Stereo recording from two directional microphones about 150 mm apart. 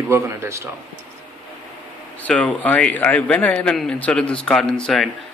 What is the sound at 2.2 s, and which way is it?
A man's voice, 10° left (ahead or behind).